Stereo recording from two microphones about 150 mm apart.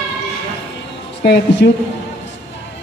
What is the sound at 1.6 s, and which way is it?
Speech, 90° left.